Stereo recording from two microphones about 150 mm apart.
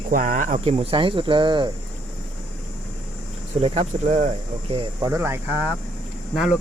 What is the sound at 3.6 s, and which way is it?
Speech, 45° right (ahead or behind).